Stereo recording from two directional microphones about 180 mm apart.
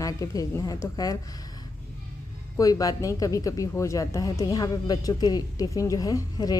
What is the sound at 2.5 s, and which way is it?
Speech, 20° left (ahead or behind).